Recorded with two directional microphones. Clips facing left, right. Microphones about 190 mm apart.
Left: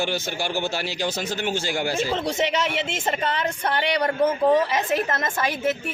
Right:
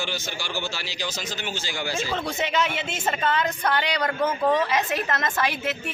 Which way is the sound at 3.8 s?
30° left (ahead or behind).